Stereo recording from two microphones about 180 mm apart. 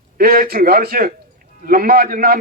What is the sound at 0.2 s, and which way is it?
A man's voice, 55° right (ahead or behind).